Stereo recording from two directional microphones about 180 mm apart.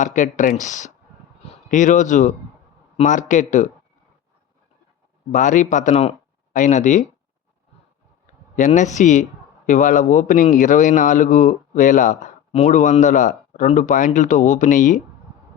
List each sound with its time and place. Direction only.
0.0 s a man's voice: 45° left (ahead or behind)
5.3 s speech: 45° left (ahead or behind)
8.5 s a man's voice: 45° left (ahead or behind)